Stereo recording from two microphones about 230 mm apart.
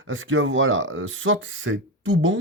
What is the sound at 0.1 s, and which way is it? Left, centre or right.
Speech, right.